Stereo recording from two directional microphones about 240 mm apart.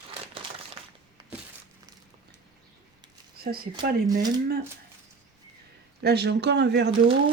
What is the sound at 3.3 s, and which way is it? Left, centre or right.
Speech, right.